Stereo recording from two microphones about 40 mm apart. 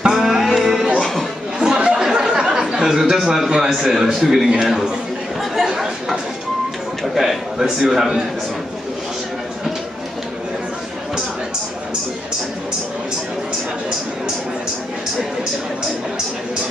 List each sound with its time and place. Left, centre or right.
0.1 s music: centre
0.9 s a sound: centre
1.6 s chatter: right
2.1 s a sound: centre
3.4 s a man's voice: right
3.7 s speech: centre
5.7 s chatter: centre
7.5 s a man's voice: right
7.9 s speech: centre